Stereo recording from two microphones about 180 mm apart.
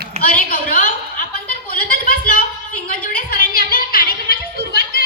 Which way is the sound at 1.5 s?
55° left (ahead or behind).